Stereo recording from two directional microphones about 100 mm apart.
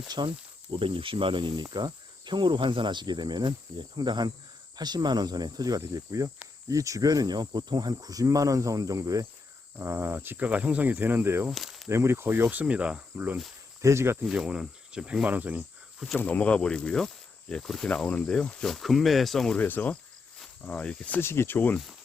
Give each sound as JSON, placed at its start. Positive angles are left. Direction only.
{"t": 0.2, "sound": "speech", "side_deg": -55}
{"t": 1.6, "sound": "cricket", "side_deg": -45}
{"t": 4.8, "sound": "speech", "side_deg": -45}
{"t": 9.7, "sound": "speech", "side_deg": -25}
{"t": 11.5, "sound": "snake", "side_deg": 0}
{"t": 11.9, "sound": "speech", "side_deg": -25}
{"t": 13.8, "sound": "speech", "side_deg": -25}
{"t": 14.3, "sound": "speech", "side_deg": -10}
{"t": 16.1, "sound": "speech", "side_deg": 15}
{"t": 19.5, "sound": "speech", "side_deg": 15}
{"t": 21.2, "sound": "speech", "side_deg": 25}